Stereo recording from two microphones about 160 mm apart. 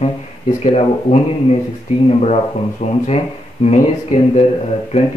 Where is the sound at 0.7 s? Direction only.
40° left (ahead or behind).